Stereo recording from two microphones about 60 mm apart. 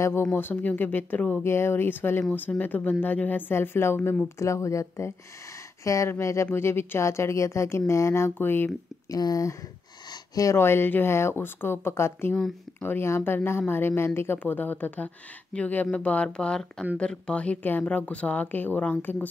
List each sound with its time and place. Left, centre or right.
0.2 s speech: left
1.4 s speech: left
3.5 s speech: left
4.4 s speech: left
8.4 s speech: left
9.1 s speech: left
10.5 s speech: left
14.4 s a woman's voice: left